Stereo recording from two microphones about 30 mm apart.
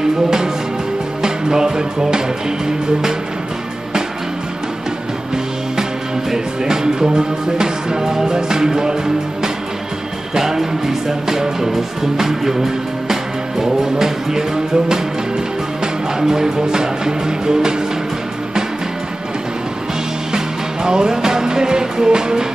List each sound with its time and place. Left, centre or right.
1.2 s music: right
6.3 s music: right
16.2 s music: centre
20.3 s music: right